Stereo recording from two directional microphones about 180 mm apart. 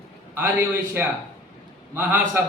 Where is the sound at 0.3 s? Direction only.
10° right (ahead or behind).